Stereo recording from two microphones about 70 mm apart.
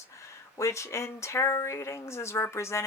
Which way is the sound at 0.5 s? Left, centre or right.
Left.